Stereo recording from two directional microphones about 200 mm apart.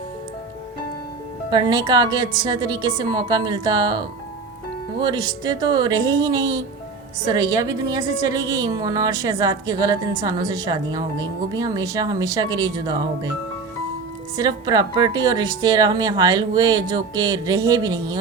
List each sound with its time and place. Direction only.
1.5 s a woman's voice: 20° right (ahead or behind)
14.3 s a woman's voice: 20° right (ahead or behind)